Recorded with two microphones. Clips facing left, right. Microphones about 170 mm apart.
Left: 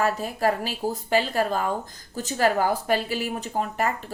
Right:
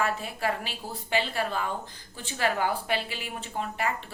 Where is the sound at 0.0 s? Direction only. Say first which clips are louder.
Left 6 dB; 40° left (ahead or behind).